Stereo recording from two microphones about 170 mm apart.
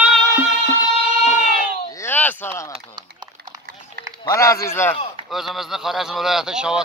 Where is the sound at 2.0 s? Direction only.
10° left (ahead or behind).